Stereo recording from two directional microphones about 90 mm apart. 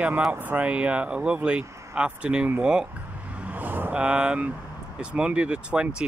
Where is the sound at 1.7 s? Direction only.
35° right (ahead or behind).